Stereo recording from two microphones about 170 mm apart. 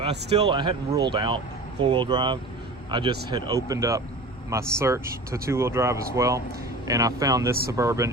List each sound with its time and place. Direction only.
0.0 s speech: 25° right (ahead or behind)